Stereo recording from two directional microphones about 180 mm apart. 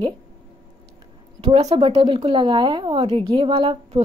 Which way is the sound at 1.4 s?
35° right (ahead or behind).